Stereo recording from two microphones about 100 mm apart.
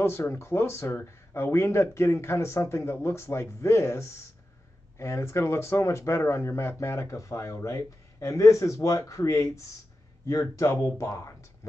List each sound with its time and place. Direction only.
0.0 s speech: 25° left (ahead or behind)